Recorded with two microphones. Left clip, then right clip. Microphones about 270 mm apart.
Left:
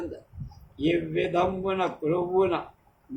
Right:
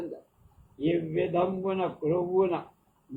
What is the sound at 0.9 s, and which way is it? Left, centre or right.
A man's voice, left.